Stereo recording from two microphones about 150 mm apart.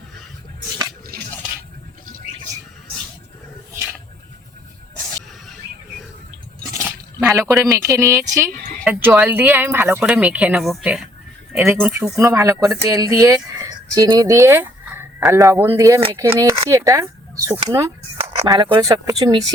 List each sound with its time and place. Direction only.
6.7 s a sound: 20° right (ahead or behind)
7.6 s speech: 20° right (ahead or behind); by 12.2 s 5° right (ahead or behind)
12.2 s speech: 20° right (ahead or behind)